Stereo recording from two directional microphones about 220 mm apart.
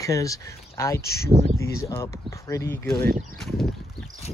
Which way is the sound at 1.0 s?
45° left (ahead or behind).